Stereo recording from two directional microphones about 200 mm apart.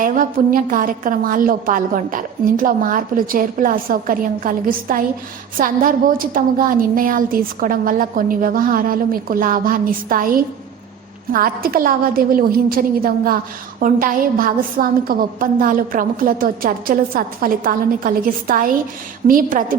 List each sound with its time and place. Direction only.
0.0 s a woman's voice: 40° right (ahead or behind)